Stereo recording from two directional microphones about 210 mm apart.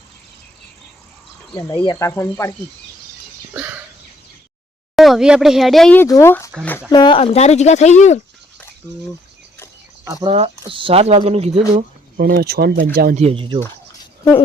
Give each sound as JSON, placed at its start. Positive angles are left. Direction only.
{"t": 1.5, "sound": "speech", "side_deg": 20}
{"t": 3.5, "sound": "a sound", "side_deg": -10}
{"t": 4.9, "sound": "speech", "side_deg": 0}
{"t": 6.9, "sound": "speech", "side_deg": 25}
{"t": 10.2, "sound": "speech", "side_deg": -30}
{"t": 12.1, "sound": "speech", "side_deg": -45}
{"t": 13.1, "sound": "speech", "side_deg": -30}